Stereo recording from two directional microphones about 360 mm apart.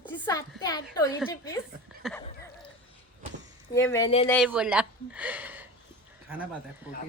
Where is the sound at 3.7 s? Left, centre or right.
Centre.